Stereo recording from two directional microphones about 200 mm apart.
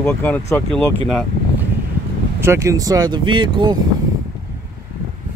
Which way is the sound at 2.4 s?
15° right (ahead or behind).